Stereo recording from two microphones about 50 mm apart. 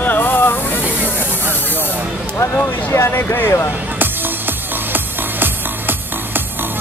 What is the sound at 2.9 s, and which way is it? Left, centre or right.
Speech, left.